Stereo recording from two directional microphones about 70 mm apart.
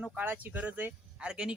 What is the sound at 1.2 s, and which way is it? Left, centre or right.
Speech, centre.